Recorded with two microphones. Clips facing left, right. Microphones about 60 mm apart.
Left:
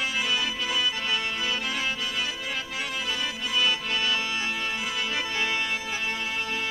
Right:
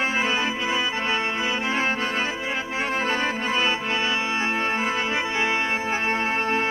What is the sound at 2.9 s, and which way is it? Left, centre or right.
Music, right.